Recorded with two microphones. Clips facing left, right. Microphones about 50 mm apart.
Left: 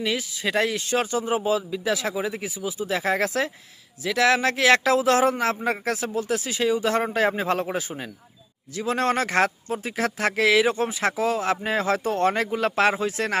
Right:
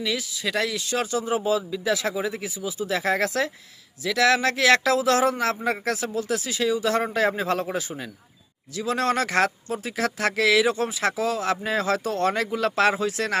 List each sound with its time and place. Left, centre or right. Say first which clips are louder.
0.0 s a man's voice: left 1 dB; left
2.9 s a man's voice: even; centre; by 13.3 s left